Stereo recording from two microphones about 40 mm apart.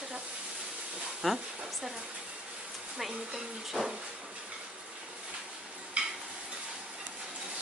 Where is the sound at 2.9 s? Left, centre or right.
Centre.